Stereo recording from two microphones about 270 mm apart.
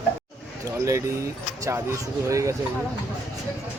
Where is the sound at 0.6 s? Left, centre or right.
Centre.